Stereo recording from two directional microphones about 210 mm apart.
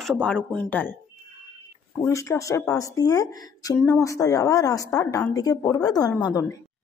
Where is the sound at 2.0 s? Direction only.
15° left (ahead or behind).